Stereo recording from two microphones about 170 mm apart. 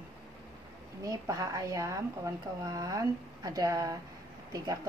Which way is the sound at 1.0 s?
20° right (ahead or behind).